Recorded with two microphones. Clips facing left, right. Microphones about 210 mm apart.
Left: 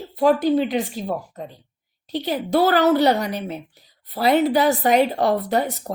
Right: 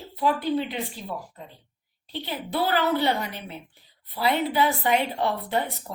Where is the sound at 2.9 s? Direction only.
40° left (ahead or behind).